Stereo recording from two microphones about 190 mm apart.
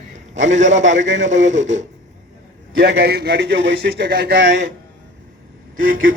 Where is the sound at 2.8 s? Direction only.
60° right (ahead or behind).